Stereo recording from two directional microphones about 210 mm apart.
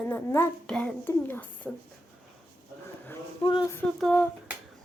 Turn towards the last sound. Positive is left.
turn(degrees=5)  # may be behind; listen again after turning